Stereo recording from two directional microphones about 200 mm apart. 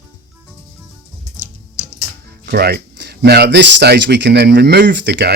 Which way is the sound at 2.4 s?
50° right (ahead or behind).